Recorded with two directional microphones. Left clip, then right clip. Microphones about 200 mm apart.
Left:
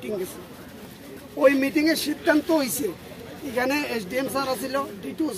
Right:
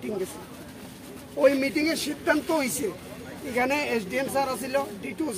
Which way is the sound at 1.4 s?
30° left (ahead or behind).